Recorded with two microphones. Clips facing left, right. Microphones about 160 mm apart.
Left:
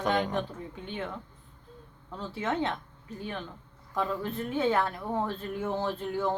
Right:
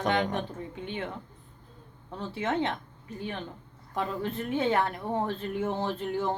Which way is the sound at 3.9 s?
20° right (ahead or behind).